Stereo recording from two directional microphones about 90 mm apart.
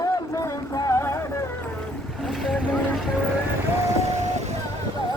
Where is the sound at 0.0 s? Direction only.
40° left (ahead or behind).